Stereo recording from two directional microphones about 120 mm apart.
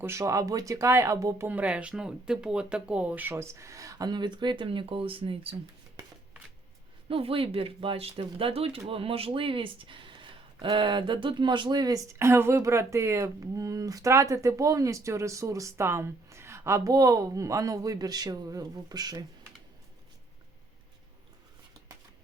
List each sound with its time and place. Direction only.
0.0 s speech: 25° right (ahead or behind)
1.5 s speech: 10° right (ahead or behind); by 5.5 s 50° right (ahead or behind)
7.1 s speech: 50° right (ahead or behind); by 19.2 s 35° right (ahead or behind)